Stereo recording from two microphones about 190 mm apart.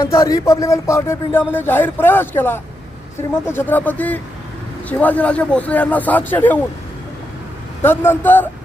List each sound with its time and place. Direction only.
0.0 s speech: 15° left (ahead or behind)
7.8 s speech: 10° left (ahead or behind)